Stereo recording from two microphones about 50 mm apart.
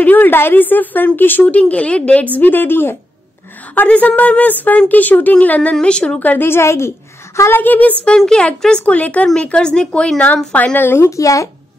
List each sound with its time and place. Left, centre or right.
0.0 s speech: left
1.6 s speech: left
2.3 s a woman's voice: left
3.7 s speech: left
5.8 s speech: centre
6.1 s speech: left
6.4 s a woman's voice: left
7.5 s speech: left
8.3 s speech: centre
8.8 s speech: left
10.2 s speech: left
10.9 s speech: left